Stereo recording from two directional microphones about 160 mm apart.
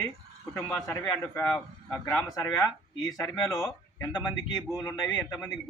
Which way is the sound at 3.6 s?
15° left (ahead or behind).